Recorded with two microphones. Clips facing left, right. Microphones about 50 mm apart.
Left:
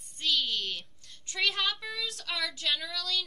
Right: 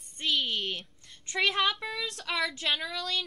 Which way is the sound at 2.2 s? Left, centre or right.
Right.